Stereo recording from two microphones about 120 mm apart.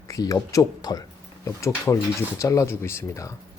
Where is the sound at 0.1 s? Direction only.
30° left (ahead or behind).